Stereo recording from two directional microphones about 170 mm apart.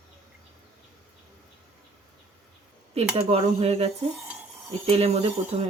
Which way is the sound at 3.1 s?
35° right (ahead or behind).